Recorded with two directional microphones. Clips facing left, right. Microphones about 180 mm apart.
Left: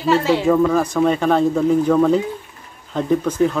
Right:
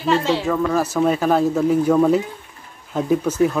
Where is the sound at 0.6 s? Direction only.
5° right (ahead or behind).